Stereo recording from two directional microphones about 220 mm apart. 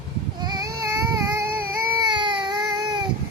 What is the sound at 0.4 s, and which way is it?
Baby cry, 15° right (ahead or behind).